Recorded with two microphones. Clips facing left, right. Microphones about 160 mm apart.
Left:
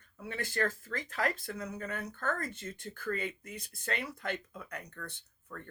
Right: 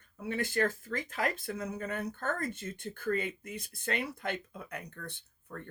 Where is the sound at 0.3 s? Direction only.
25° right (ahead or behind).